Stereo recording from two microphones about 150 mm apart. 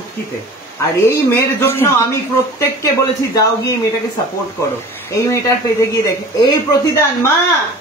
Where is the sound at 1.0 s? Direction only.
15° left (ahead or behind).